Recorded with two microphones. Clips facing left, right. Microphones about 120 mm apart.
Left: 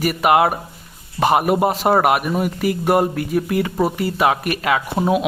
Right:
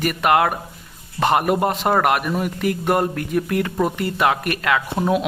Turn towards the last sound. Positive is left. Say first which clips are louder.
# left 1 dB
turn(degrees=10)  # may be behind; listen again after turning